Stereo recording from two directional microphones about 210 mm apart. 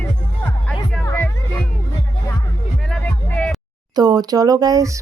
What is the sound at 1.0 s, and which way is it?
Music, 10° left (ahead or behind).